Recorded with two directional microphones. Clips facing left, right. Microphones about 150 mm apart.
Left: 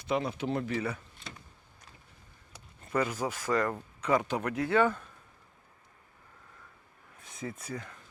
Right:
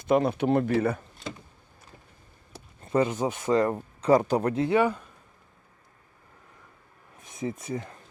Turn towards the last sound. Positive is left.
turn(degrees=-25)  # may be behind; listen again after turning